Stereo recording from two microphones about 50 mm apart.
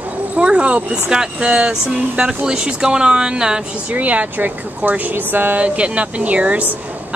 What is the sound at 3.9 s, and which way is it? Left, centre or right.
Speech, right.